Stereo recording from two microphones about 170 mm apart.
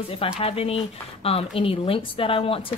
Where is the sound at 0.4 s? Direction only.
35° left (ahead or behind).